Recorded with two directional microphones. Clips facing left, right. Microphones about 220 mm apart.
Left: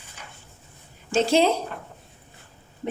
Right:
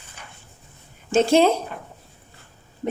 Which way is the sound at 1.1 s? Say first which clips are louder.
Right 3 dB; 50° right (ahead or behind).